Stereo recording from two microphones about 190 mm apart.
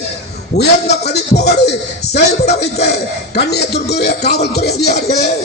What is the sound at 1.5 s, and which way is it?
Speech, 60° left (ahead or behind).